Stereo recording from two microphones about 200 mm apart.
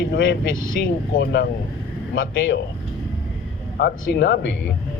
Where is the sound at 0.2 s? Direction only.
70° left (ahead or behind).